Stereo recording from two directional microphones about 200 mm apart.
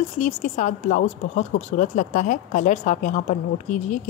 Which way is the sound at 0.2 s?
40° left (ahead or behind).